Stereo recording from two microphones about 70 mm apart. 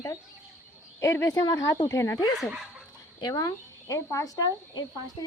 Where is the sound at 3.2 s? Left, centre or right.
Left.